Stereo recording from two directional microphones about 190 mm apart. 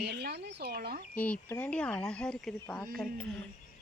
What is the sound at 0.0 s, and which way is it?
Speech, 60° right (ahead or behind).